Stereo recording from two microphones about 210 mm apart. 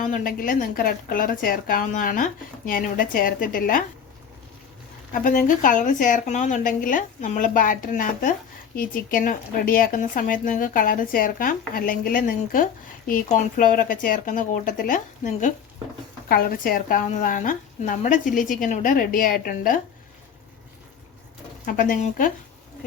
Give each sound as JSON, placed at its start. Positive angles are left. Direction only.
{"t": 0.0, "sound": "a woman's voice", "side_deg": 40}
{"t": 5.1, "sound": "a woman's voice", "side_deg": 40}
{"t": 21.7, "sound": "a woman's voice", "side_deg": 40}